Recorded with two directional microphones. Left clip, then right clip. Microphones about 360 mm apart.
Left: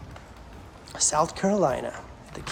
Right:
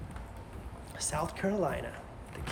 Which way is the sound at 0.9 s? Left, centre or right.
Centre.